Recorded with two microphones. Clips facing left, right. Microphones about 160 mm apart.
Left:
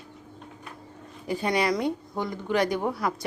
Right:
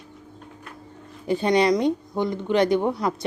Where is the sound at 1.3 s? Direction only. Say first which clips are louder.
Right 6 dB; 25° right (ahead or behind).